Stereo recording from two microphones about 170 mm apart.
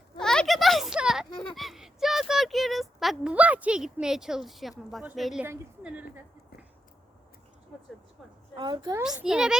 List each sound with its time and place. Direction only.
0.2 s a sound: 5° left (ahead or behind)
5.0 s a child's voice: centre (ahead or behind)
8.5 s a woman's voice: 25° right (ahead or behind)
9.0 s a child's voice: 5° right (ahead or behind)